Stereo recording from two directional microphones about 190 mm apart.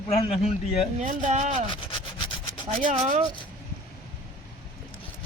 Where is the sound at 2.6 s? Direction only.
40° right (ahead or behind).